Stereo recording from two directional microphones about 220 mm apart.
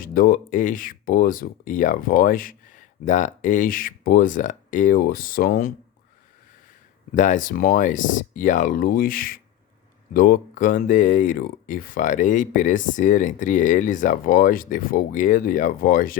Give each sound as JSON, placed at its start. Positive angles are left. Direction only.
{"t": 0.0, "sound": "speech", "side_deg": 40}
{"t": 7.1, "sound": "speech", "side_deg": 35}